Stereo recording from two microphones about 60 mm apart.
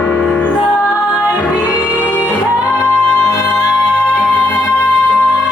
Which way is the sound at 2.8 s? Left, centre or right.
Left.